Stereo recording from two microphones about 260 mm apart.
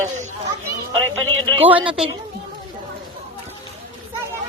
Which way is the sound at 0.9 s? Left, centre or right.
Right.